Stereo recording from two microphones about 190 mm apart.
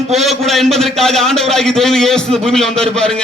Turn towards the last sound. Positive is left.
turn(degrees=5)  # may be behind; listen again after turning